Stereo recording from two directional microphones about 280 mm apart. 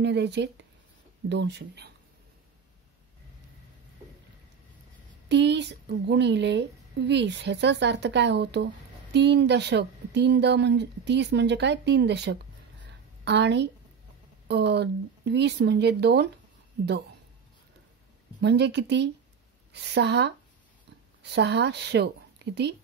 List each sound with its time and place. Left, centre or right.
0.0 s a woman's voice: right
5.3 s a woman's voice: right
12.8 s a sound: right
14.5 s a woman's voice: right
18.4 s a woman's voice: right